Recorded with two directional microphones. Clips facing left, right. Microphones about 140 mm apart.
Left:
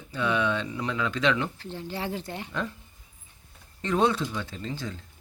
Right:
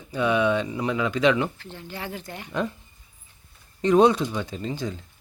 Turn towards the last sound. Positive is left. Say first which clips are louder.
# right 5 dB
turn(degrees=-15)  # may be behind; listen again after turning